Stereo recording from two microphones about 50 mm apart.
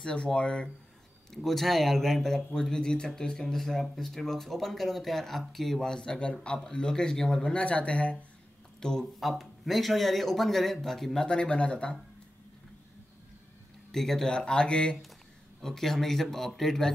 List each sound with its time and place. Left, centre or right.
0.0 s speech: centre
1.3 s speech: centre
7.5 s speech: left
9.0 s a man's voice: centre
11.2 s speech: centre
13.9 s speech: centre
15.6 s speech: centre